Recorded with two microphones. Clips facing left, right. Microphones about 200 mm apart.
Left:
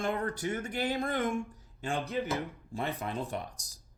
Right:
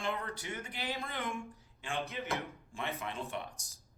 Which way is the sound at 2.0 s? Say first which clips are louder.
Left 6 dB; 35° left (ahead or behind).